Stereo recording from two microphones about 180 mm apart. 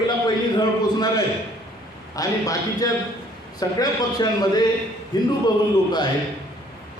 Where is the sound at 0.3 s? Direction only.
25° left (ahead or behind).